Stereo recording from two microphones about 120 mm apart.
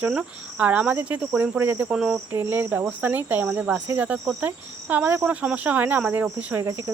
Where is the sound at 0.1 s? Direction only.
10° right (ahead or behind).